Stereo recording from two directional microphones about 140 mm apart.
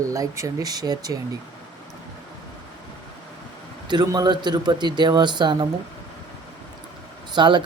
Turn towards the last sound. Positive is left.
turn(degrees=-35)  # may be behind; listen again after turning